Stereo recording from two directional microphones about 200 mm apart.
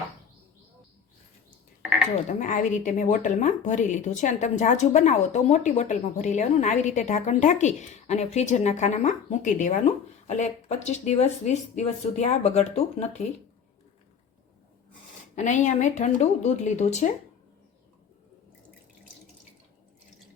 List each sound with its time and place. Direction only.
1.8 s a sound: 5° right (ahead or behind)
2.4 s speech: 40° left (ahead or behind)
15.4 s speech: 35° left (ahead or behind)